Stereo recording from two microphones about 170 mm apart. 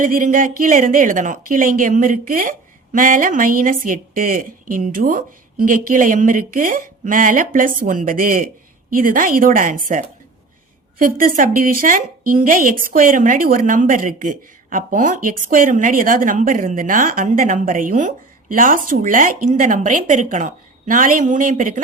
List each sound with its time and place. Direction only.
0.0 s speech: 50° right (ahead or behind)